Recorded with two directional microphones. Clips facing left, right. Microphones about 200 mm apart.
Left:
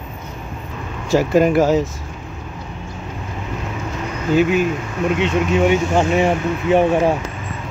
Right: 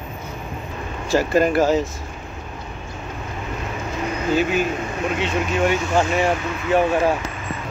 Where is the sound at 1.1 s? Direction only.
15° left (ahead or behind).